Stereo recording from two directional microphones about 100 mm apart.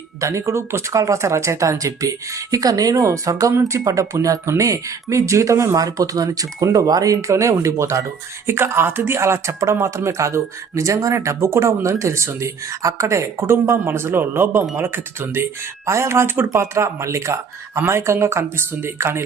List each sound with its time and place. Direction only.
0.2 s speech: 30° right (ahead or behind)